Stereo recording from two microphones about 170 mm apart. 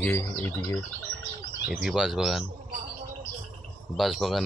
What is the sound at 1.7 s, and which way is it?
Speech, 5° right (ahead or behind).